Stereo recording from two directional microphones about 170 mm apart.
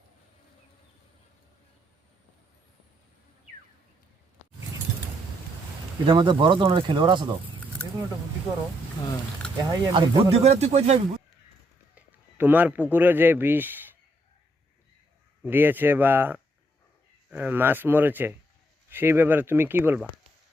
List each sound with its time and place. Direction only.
6.1 s speech: 30° right (ahead or behind)
9.6 s speech: 20° right (ahead or behind)
10.4 s speech: 40° right (ahead or behind)
11.9 s a man's voice: 10° right (ahead or behind)
15.4 s speech: 10° right (ahead or behind)